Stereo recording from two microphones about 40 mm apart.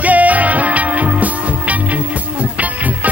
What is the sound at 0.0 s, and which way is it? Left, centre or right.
Music, right.